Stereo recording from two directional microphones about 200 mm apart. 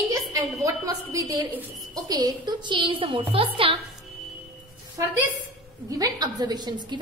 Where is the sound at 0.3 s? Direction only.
15° right (ahead or behind).